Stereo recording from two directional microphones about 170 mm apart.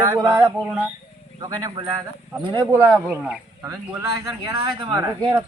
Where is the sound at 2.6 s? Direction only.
10° right (ahead or behind).